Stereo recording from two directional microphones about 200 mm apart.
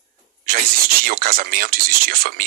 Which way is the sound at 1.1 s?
45° right (ahead or behind).